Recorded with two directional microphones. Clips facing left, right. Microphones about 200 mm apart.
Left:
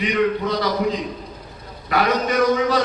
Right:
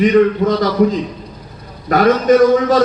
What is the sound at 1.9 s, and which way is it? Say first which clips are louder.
Speech: right 9 dB; 45° right (ahead or behind).